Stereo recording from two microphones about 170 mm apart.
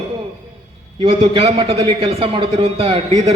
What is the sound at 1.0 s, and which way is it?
A man's voice, 35° right (ahead or behind).